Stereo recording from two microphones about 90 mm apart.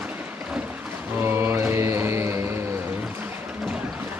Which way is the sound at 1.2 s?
25° right (ahead or behind).